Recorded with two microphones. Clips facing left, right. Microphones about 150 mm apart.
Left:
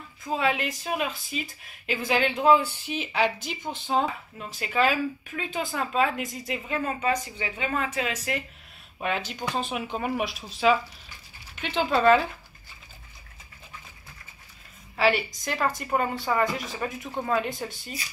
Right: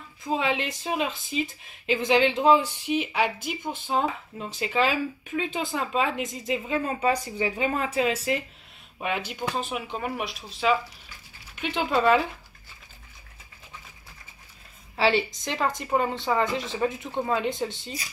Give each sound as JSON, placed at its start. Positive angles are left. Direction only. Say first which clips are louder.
{"t": 0.2, "sound": "speech", "louder": "even", "side_deg": -20}
{"t": 4.6, "sound": "speech", "louder": "even", "side_deg": -20}
{"t": 9.3, "sound": "speech", "louder": "even", "side_deg": -10}
{"t": 11.6, "sound": "speech", "louder": "left 1 dB", "side_deg": -10}
{"t": 15.0, "sound": "speech", "louder": "right 1 dB", "side_deg": -25}